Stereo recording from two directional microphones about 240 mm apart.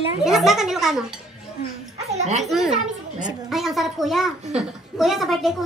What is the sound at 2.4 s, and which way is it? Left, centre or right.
A woman's voice, centre.